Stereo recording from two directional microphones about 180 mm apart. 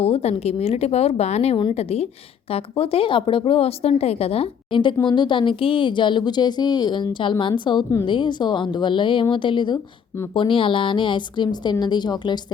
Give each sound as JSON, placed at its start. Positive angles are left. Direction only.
{"t": 0.0, "sound": "a woman's voice", "side_deg": 35}